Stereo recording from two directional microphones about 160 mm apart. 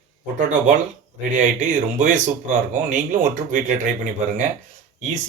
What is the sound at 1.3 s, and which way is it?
Speech, 50° right (ahead or behind).